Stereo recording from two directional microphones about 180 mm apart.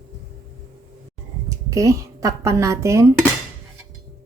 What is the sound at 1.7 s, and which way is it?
Speech, 20° right (ahead or behind).